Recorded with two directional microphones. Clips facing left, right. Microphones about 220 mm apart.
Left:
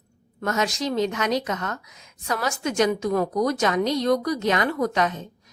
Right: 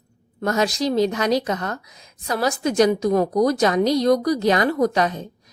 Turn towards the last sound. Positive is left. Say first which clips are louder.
# right 4 dB
turn(degrees=-35)  # may be behind; listen again after turning